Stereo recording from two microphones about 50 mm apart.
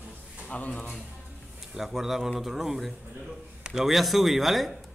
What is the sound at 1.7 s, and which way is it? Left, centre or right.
A man's voice, centre.